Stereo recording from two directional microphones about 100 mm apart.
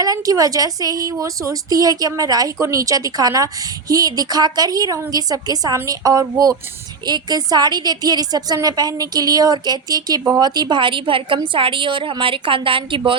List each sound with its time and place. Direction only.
0.0 s a woman's voice: 40° right (ahead or behind); by 13.0 s 60° right (ahead or behind)